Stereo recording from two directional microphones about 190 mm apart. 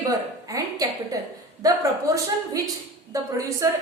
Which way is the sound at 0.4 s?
20° right (ahead or behind).